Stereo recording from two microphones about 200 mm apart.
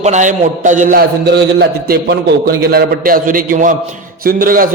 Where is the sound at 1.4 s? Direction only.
55° right (ahead or behind).